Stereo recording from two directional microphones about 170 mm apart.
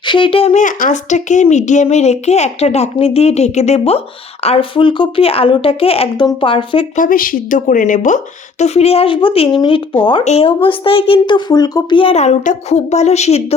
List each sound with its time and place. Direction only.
0.0 s speech: 30° left (ahead or behind)
6.9 s speech: 55° left (ahead or behind)